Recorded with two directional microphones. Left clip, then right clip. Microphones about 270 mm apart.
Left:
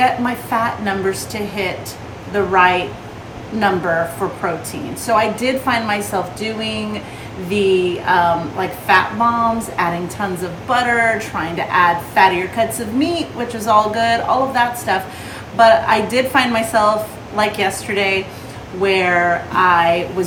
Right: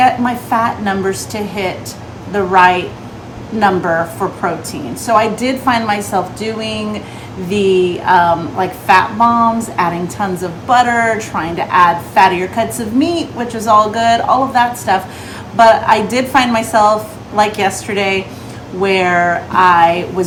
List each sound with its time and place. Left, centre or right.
0.5 s a woman's voice: centre